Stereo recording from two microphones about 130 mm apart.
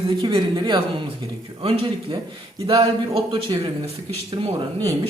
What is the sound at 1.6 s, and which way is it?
Speech, 45° right (ahead or behind).